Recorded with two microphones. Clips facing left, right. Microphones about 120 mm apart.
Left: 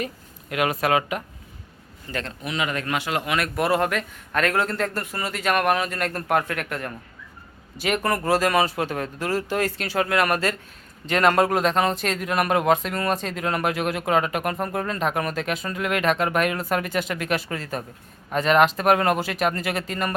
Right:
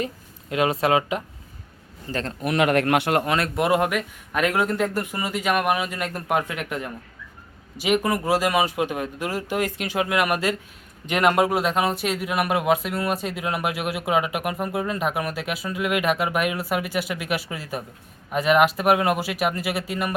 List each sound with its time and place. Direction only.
0.5 s a man's voice: 25° right (ahead or behind)
2.4 s speech: 60° right (ahead or behind)
3.2 s speech: 30° right (ahead or behind); by 20.1 s 10° right (ahead or behind)